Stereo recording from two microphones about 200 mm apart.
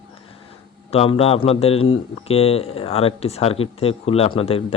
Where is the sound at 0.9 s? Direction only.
30° left (ahead or behind).